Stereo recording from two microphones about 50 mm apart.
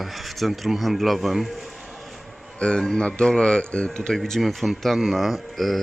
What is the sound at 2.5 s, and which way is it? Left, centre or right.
A man's voice, centre.